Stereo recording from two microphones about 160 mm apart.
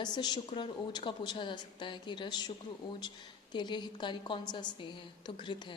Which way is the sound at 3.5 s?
30° left (ahead or behind).